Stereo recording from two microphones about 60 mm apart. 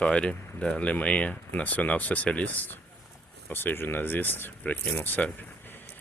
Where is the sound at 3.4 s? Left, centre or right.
Left.